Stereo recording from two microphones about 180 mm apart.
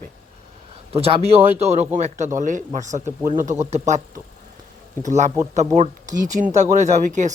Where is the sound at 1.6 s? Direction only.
35° right (ahead or behind).